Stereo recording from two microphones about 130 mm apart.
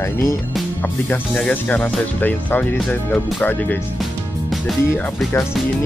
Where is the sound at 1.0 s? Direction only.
10° left (ahead or behind).